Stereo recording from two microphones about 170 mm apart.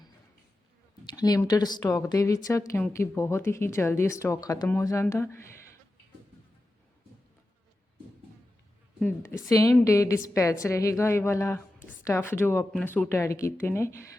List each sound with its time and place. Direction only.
1.0 s a sound: 25° left (ahead or behind)
1.5 s a woman's voice: 25° left (ahead or behind)
9.2 s a woman's voice: 20° left (ahead or behind)